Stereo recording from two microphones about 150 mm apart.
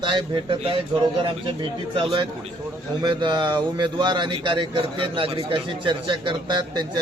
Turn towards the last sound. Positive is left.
turn(degrees=-30)  # may be behind; listen again after turning